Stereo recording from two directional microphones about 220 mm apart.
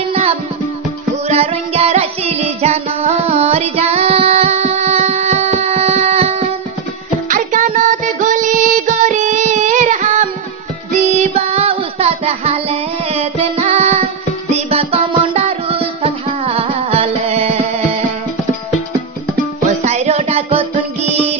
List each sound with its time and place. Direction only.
0.1 s music: 25° right (ahead or behind)
19.8 s music: 30° right (ahead or behind)